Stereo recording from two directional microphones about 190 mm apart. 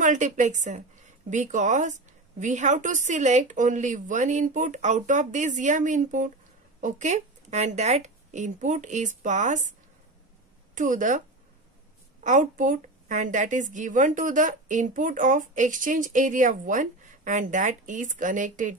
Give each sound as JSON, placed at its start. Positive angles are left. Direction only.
{"t": 0.0, "sound": "a woman's voice", "side_deg": -40}